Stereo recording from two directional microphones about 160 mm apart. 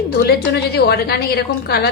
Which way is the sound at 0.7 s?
85° left.